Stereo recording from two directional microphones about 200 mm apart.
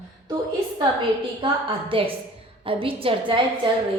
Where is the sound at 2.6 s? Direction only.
25° right (ahead or behind).